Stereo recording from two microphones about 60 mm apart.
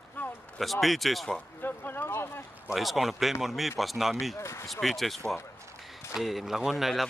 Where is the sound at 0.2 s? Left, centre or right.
Left.